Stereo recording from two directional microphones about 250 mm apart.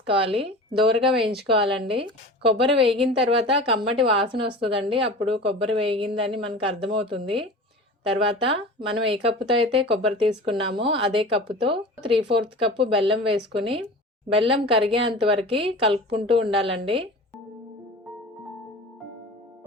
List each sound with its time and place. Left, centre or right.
0.0 s a woman's voice: right